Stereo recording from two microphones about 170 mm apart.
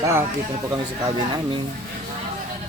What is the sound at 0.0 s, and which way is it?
Speech, 15° right (ahead or behind).